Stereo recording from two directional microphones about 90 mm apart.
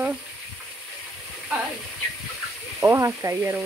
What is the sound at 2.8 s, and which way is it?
Speech, 30° right (ahead or behind).